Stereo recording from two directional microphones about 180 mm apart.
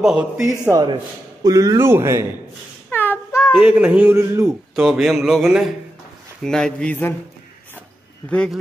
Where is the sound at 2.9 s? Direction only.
10° left (ahead or behind).